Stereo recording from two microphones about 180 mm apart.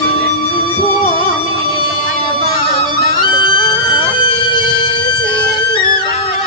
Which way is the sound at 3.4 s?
25° left (ahead or behind).